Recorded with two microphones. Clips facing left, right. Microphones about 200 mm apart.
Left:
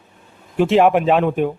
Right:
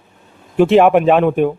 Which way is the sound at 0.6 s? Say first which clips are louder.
Right 4 dB; 60° right (ahead or behind).